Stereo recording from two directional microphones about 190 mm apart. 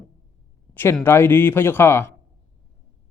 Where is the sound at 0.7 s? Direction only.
10° left (ahead or behind).